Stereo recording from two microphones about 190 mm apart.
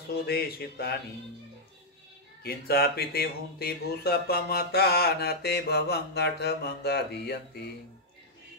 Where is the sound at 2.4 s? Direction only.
55° left (ahead or behind).